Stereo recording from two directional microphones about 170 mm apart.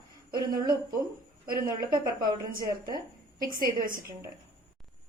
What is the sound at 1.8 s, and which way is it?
A woman's voice, 25° right (ahead or behind).